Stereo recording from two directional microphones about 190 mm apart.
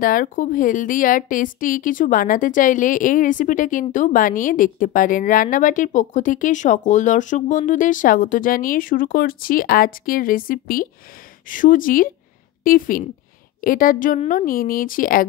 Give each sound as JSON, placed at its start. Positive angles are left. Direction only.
{"t": 0.0, "sound": "a woman's voice", "side_deg": 45}